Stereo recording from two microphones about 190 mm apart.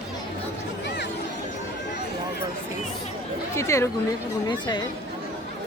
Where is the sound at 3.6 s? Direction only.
15° left (ahead or behind).